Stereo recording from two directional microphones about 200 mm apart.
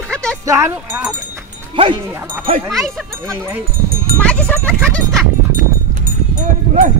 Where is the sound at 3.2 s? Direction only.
10° right (ahead or behind).